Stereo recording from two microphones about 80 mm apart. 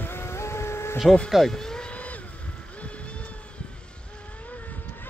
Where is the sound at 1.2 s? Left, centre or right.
Centre.